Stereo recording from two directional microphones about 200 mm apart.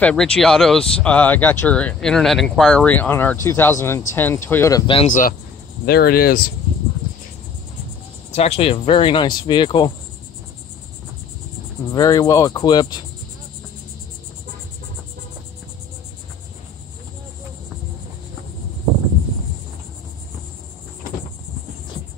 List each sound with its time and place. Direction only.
0.0 s speech: 5° left (ahead or behind); by 5.0 s 20° left (ahead or behind)
5.9 s speech: 50° left (ahead or behind)
8.4 s speech: 30° left (ahead or behind)
11.9 s speech: 20° left (ahead or behind)